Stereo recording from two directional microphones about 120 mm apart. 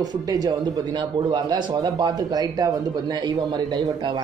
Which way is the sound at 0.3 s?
30° right (ahead or behind).